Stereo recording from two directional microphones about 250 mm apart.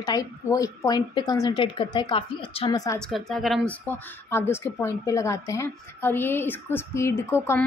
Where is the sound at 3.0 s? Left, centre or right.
Centre.